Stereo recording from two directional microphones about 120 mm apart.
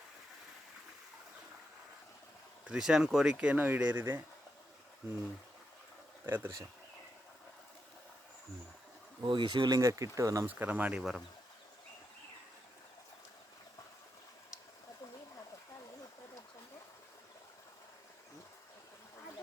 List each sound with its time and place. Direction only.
2.6 s speech: 5° right (ahead or behind)
6.2 s speech: 20° right (ahead or behind)
9.2 s speech: 40° right (ahead or behind); by 10.5 s 25° right (ahead or behind)
10.5 s speech: 15° right (ahead or behind)